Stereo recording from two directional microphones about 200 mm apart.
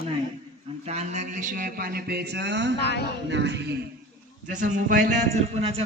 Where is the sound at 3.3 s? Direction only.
60° right (ahead or behind).